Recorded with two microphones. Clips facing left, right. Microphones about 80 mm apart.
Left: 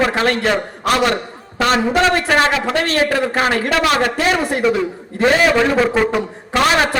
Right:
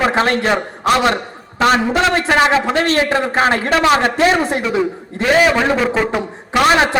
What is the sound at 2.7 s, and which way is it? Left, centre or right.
A man's voice, right.